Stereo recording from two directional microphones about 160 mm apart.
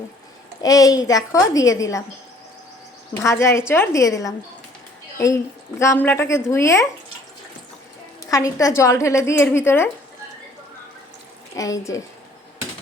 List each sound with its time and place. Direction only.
0.6 s a woman's voice: 20° left (ahead or behind)
3.2 s a woman's voice: 15° left (ahead or behind)
8.3 s a woman's voice: 20° left (ahead or behind)
11.5 s a woman's voice: 20° left (ahead or behind)